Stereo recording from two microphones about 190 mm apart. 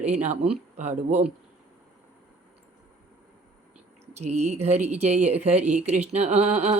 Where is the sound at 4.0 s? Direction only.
35° right (ahead or behind).